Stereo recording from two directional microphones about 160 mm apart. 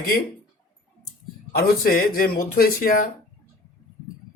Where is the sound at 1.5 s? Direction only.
70° left (ahead or behind).